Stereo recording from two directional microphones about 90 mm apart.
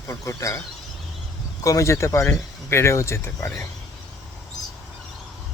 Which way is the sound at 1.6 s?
35° left (ahead or behind).